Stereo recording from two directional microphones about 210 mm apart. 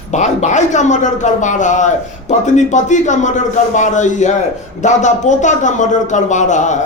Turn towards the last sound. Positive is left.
turn(degrees=35)  # may be behind; listen again after turning